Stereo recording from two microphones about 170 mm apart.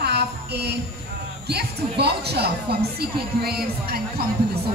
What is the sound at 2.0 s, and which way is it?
Speech, 75° right (ahead or behind).